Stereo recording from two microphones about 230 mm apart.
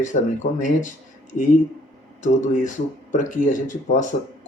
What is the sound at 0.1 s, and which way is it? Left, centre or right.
Speech, left.